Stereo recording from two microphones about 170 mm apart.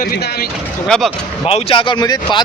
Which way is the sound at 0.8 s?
5° left (ahead or behind).